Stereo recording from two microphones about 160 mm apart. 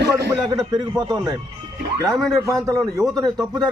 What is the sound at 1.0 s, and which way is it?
Speech, 25° right (ahead or behind).